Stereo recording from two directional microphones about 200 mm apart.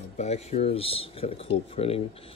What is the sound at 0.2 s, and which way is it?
Speech, 30° left (ahead or behind).